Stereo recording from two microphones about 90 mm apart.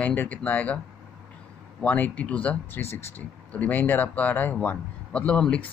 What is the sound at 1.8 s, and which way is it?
Speech, 15° left (ahead or behind).